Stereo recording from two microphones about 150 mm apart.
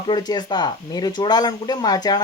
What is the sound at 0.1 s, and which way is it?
Speech, 25° left (ahead or behind).